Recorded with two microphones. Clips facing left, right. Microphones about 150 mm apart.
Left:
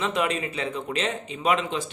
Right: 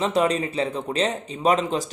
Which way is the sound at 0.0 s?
35° right (ahead or behind).